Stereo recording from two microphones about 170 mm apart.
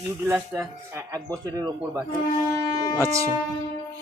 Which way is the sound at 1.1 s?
20° right (ahead or behind).